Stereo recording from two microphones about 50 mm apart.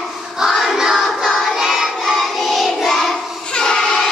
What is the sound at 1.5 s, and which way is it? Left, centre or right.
Child singing, centre.